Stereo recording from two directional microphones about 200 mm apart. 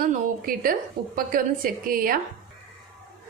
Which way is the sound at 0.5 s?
45° right (ahead or behind).